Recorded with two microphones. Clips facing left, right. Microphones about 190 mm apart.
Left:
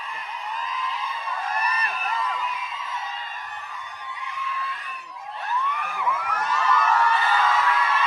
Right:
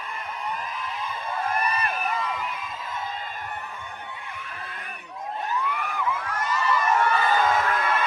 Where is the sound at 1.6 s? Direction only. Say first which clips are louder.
Right 2 dB; 50° right (ahead or behind).